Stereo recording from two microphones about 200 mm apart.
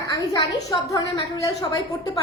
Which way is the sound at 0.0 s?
20° left (ahead or behind).